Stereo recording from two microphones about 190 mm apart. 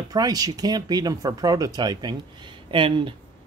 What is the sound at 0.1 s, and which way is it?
Speech, 20° right (ahead or behind).